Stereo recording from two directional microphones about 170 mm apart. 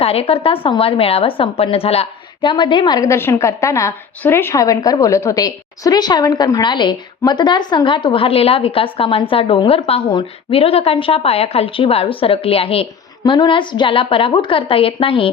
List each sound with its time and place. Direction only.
0.0 s a woman's voice: 35° left (ahead or behind)